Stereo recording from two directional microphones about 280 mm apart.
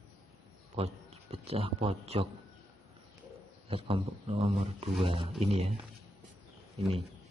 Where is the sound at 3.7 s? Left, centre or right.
Centre.